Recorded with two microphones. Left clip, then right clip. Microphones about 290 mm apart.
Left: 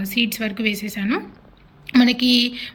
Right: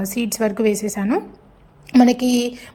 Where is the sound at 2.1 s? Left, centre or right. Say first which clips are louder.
Left 1 dB; right.